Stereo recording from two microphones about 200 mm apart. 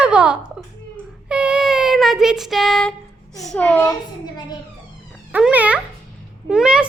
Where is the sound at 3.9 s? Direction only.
20° left (ahead or behind).